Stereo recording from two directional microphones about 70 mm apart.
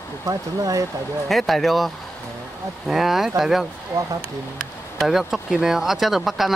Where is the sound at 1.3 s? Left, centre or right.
Centre.